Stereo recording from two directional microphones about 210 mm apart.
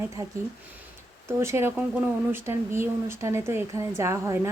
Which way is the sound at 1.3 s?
10° right (ahead or behind).